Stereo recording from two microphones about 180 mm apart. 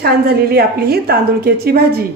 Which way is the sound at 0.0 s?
60° right (ahead or behind).